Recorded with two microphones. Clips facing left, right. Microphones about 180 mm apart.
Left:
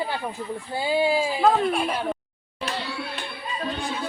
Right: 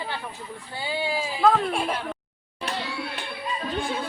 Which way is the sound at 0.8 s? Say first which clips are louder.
Left 6 dB; 15° left (ahead or behind).